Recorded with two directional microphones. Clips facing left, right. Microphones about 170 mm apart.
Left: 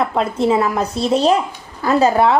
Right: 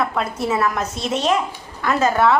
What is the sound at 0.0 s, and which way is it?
A woman's voice, 25° left (ahead or behind).